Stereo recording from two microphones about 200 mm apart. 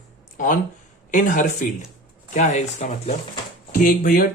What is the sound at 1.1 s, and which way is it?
Speech, 40° left (ahead or behind).